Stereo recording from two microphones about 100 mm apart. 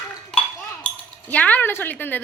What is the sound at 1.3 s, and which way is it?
Speech, 15° left (ahead or behind).